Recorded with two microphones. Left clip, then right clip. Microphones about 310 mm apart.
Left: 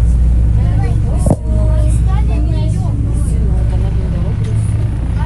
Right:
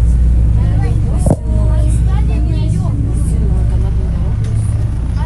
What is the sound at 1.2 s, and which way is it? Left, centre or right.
Vehicle, centre.